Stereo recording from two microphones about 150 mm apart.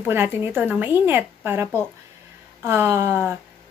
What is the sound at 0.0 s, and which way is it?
A woman's voice, 15° right (ahead or behind).